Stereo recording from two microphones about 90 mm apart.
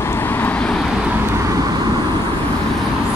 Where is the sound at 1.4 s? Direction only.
45° right (ahead or behind).